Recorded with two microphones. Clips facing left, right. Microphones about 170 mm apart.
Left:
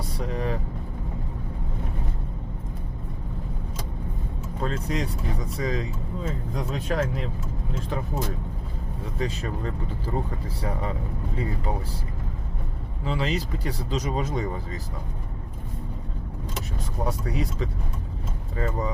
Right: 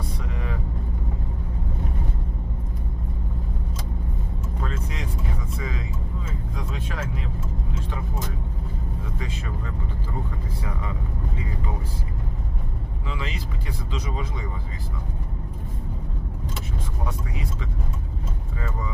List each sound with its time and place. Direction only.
0.2 s vehicle: 35° left (ahead or behind)
4.6 s vehicle: 35° left (ahead or behind)
5.5 s speech: 35° left (ahead or behind)
9.1 s speech: 35° left (ahead or behind)
13.1 s speech: 35° left (ahead or behind)
17.1 s speech: 40° left (ahead or behind)